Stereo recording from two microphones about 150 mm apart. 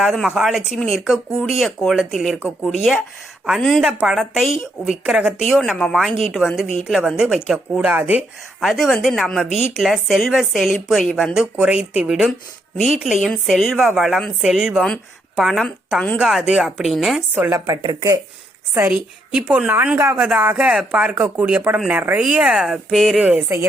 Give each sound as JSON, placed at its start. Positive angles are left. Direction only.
{"t": 0.0, "sound": "speech", "side_deg": 0}
{"t": 8.6, "sound": "speech", "side_deg": 0}
{"t": 16.2, "sound": "speech", "side_deg": 0}
{"t": 17.3, "sound": "speech", "side_deg": -15}
{"t": 17.7, "sound": "speech", "side_deg": -25}
{"t": 19.5, "sound": "speech", "side_deg": -10}